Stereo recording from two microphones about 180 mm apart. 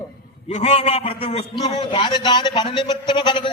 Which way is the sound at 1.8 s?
25° left (ahead or behind).